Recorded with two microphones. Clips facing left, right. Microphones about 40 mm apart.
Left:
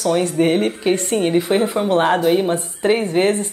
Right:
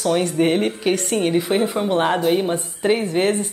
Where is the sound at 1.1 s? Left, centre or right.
Centre.